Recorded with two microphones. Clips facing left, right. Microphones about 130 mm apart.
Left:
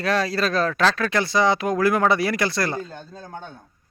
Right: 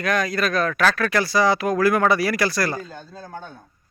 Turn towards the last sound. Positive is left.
turn(degrees=20)  # may be behind; listen again after turning